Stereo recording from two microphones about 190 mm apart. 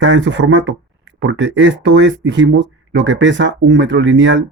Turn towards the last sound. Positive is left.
turn(degrees=-70)  # may be behind; listen again after turning